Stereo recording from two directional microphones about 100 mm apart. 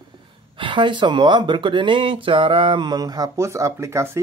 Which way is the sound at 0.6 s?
55° right (ahead or behind).